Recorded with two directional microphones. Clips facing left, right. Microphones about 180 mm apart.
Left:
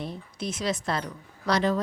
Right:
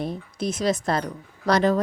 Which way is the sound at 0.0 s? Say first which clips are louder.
Right 6 dB; 45° right (ahead or behind).